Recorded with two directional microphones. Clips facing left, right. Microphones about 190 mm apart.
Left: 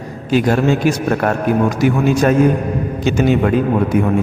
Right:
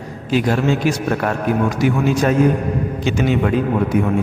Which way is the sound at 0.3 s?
50° left (ahead or behind).